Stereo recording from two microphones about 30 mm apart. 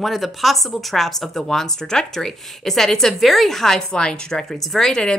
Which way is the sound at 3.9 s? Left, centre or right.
Left.